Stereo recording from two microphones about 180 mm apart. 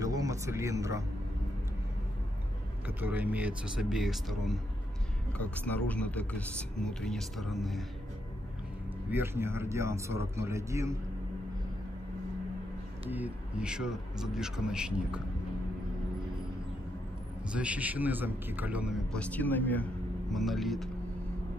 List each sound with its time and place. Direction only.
0.0 s a sound: 20° right (ahead or behind)
3.0 s speech: 10° right (ahead or behind)
9.1 s a man's voice: 15° right (ahead or behind)
13.1 s speech: 5° right (ahead or behind)
17.5 s a man's voice: 5° right (ahead or behind)
19.1 s a man's voice: 5° left (ahead or behind)